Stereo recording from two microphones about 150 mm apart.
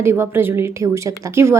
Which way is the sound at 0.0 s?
15° right (ahead or behind).